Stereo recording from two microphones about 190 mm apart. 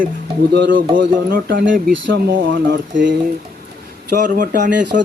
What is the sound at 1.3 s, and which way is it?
Speech, 50° right (ahead or behind).